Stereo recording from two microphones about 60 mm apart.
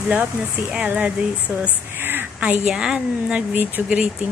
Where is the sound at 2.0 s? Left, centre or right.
Right.